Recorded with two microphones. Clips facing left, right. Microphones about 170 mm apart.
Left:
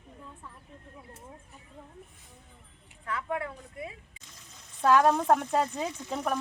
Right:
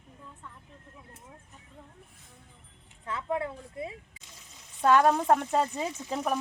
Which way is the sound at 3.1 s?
25° right (ahead or behind).